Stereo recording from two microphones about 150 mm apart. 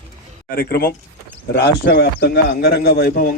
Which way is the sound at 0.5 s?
80° left.